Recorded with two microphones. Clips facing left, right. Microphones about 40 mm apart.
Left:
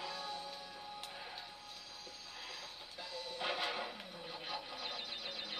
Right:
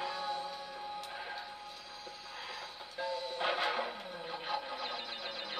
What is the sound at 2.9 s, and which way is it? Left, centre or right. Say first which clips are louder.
Music: right 8 dB; centre.